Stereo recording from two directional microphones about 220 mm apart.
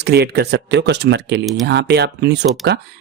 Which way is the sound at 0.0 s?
45° right (ahead or behind).